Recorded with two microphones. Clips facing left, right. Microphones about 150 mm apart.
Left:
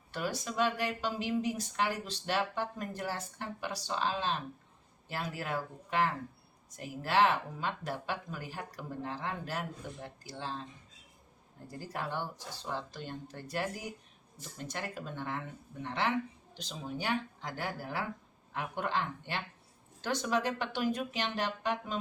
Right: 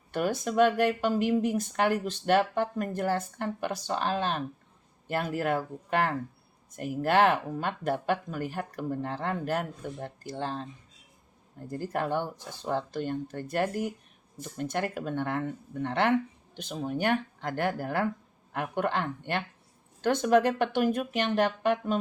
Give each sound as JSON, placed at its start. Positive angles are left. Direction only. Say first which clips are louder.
{"t": 0.1, "sound": "speech", "louder": "right 8 dB", "side_deg": -55}
{"t": 11.7, "sound": "speech", "louder": "right 9 dB", "side_deg": -55}